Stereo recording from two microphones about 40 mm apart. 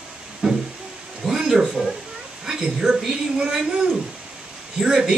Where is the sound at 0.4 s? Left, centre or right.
Centre.